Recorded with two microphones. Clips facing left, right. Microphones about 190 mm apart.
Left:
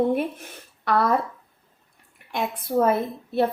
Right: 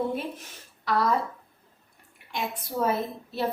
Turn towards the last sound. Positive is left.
turn(degrees=55)  # may be behind; listen again after turning